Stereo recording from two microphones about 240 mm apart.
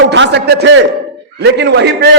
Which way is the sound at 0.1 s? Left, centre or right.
Right.